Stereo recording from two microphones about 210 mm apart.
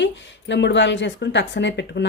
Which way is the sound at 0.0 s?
60° left (ahead or behind).